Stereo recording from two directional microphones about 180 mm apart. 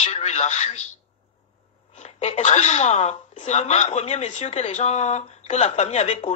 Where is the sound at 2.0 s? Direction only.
35° left (ahead or behind).